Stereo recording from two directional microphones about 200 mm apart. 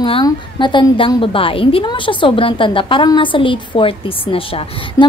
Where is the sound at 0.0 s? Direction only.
25° left (ahead or behind).